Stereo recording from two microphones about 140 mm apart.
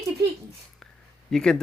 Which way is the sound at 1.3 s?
5° left (ahead or behind).